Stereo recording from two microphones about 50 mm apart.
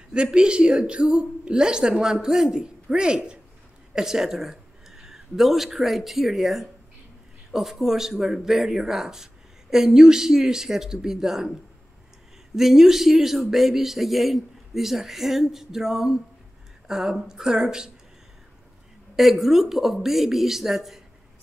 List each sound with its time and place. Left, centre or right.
0.1 s speech: centre
12.5 s speech: centre
19.1 s speech: centre